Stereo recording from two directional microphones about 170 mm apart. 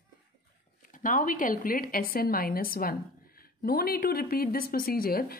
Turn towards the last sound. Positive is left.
turn(degrees=60)  # may be behind; listen again after turning